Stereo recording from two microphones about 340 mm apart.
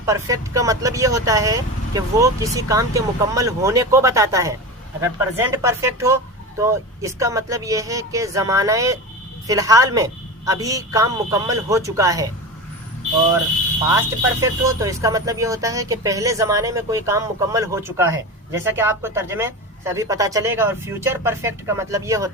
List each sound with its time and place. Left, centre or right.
0.0 s speech: centre
14.4 s speech: centre